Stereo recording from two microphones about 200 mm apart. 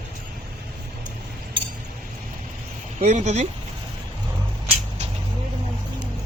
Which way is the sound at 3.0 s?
35° right (ahead or behind).